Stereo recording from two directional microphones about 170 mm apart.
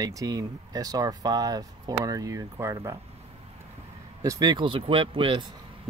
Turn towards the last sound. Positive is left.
turn(degrees=-30)  # may be behind; listen again after turning